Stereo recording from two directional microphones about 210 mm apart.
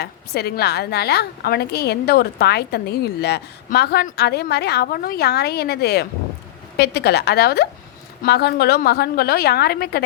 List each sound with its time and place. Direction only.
0.0 s a woman's voice: 50° left (ahead or behind)